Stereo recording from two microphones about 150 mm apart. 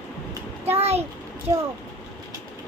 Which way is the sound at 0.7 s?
45° right (ahead or behind).